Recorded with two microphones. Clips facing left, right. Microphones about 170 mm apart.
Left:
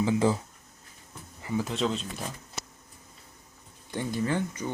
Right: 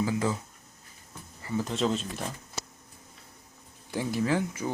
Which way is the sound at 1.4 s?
15° left (ahead or behind).